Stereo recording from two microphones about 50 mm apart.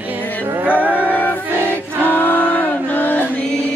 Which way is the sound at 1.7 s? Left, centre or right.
Left.